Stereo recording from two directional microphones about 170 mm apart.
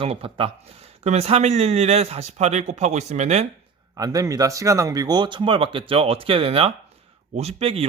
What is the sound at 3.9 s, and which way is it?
Speech, 20° right (ahead or behind).